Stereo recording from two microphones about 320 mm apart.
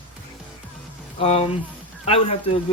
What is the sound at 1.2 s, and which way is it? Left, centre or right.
Speech, centre.